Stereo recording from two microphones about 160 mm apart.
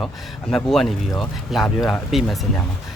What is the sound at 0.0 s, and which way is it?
Speech, centre (ahead or behind).